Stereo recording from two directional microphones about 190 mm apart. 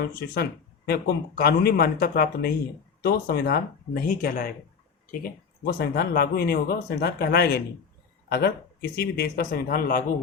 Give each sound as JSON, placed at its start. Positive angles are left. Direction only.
{"t": 0.1, "sound": "speech", "side_deg": 55}